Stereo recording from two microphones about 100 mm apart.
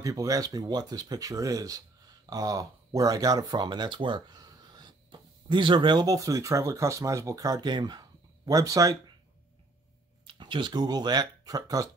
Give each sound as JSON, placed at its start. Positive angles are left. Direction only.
{"t": 0.0, "sound": "speech", "side_deg": -35}
{"t": 4.4, "sound": "speech", "side_deg": -40}
{"t": 10.2, "sound": "speech", "side_deg": -55}